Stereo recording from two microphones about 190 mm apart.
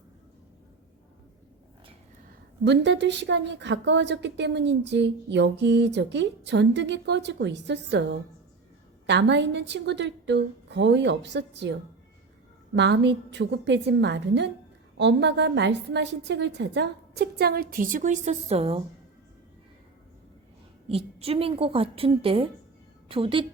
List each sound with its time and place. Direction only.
2.6 s a woman's voice: 65° right (ahead or behind); by 18.8 s 30° right (ahead or behind)
20.9 s a woman's voice: 30° right (ahead or behind)